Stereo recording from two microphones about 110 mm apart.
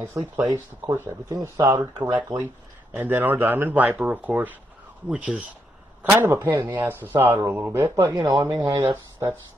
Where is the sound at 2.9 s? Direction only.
15° right (ahead or behind).